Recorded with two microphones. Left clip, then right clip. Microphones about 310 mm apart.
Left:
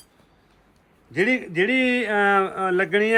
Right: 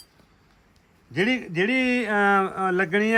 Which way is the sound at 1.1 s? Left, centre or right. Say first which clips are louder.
Left 3 dB; right.